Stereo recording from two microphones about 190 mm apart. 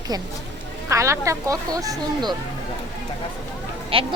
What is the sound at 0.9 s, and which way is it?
Speech, 15° right (ahead or behind).